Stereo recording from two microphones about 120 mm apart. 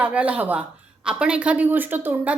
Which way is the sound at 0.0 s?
10° right (ahead or behind).